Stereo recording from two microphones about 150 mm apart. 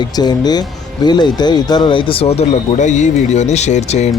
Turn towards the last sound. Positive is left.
turn(degrees=50)  # may be behind; listen again after turning